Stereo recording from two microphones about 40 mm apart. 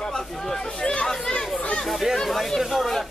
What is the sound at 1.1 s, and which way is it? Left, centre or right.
Chatter, centre.